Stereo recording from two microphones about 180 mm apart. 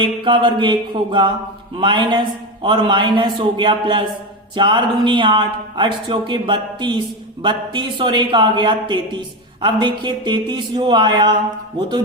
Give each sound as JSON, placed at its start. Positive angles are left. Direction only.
{"t": 0.0, "sound": "speech", "side_deg": -25}